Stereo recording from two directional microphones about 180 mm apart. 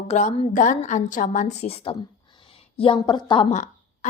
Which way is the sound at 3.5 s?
45° left (ahead or behind).